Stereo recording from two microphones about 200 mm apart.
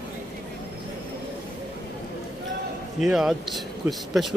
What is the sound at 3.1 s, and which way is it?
Speech, centre (ahead or behind).